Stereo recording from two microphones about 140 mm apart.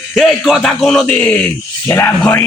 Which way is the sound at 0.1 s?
Centre (ahead or behind).